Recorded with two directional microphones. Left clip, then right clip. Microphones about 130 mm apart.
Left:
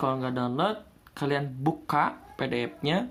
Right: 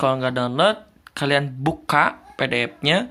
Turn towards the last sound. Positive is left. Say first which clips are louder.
# right 9 dB
turn(degrees=-25)  # may be behind; listen again after turning